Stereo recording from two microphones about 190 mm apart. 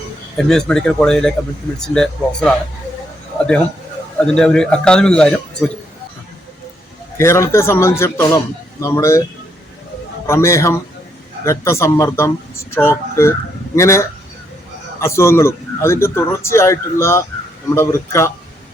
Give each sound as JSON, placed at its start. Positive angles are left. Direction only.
{"t": 0.3, "sound": "a man's voice", "side_deg": 5}
{"t": 7.2, "sound": "speech", "side_deg": 15}
{"t": 10.2, "sound": "speech", "side_deg": 15}